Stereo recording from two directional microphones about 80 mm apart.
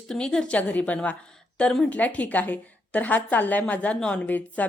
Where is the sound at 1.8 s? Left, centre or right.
Centre.